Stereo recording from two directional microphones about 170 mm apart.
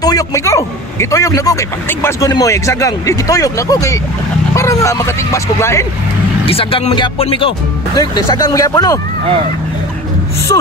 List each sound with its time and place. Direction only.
0.0 s a man's voice: 20° left (ahead or behind)
6.4 s speech: 30° left (ahead or behind)
8.0 s a man's voice: 20° left (ahead or behind)
10.5 s a man's voice: 25° left (ahead or behind)